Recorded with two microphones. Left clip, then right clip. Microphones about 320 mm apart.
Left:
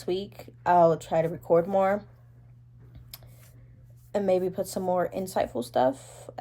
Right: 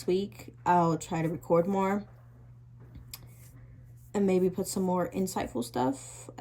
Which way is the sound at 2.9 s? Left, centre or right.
Centre.